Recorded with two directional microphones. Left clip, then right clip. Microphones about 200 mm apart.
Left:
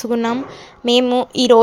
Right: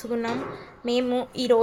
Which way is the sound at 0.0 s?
35° left (ahead or behind).